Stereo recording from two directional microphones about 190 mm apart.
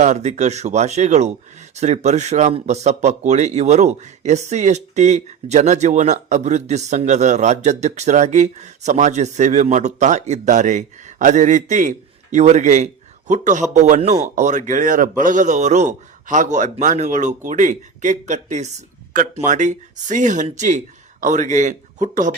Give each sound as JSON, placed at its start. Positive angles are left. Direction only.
{"t": 0.0, "sound": "speech", "side_deg": -35}